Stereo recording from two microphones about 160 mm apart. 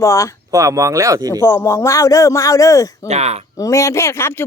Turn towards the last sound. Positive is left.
turn(degrees=15)  # may be behind; listen again after turning